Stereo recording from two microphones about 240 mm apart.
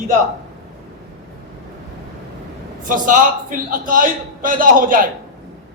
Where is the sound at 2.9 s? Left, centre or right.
Right.